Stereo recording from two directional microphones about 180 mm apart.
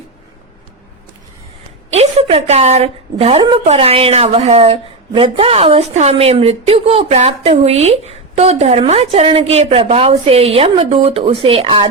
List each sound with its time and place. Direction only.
1.9 s a woman's voice: 35° right (ahead or behind)